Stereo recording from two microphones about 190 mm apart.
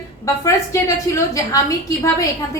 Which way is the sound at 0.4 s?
15° left (ahead or behind).